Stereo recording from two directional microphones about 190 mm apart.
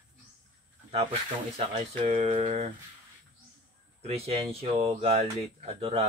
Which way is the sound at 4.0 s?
35° right (ahead or behind).